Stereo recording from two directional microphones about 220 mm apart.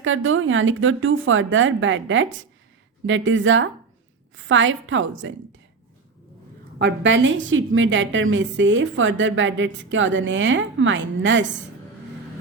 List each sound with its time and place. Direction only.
0.0 s a woman's voice: 65° right (ahead or behind)
6.7 s a woman's voice: 55° right (ahead or behind)